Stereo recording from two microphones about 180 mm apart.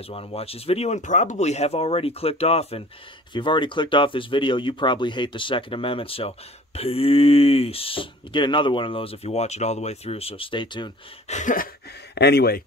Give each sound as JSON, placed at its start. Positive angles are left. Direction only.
{"t": 0.0, "sound": "speech", "side_deg": 35}
{"t": 11.2, "sound": "a sound", "side_deg": 45}
{"t": 12.2, "sound": "speech", "side_deg": 65}